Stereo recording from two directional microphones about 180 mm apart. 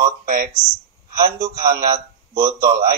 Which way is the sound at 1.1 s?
55° right (ahead or behind).